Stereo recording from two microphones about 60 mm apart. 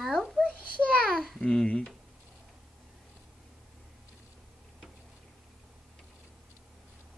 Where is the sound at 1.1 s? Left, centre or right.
Centre.